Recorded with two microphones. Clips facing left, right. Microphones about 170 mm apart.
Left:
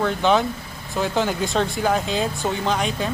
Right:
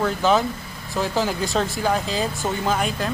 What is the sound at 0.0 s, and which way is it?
Speech, centre (ahead or behind).